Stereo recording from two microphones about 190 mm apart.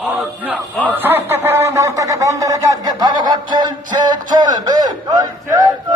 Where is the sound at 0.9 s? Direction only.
10° right (ahead or behind).